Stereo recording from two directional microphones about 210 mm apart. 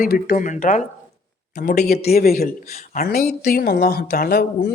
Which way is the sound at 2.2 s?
45° left (ahead or behind).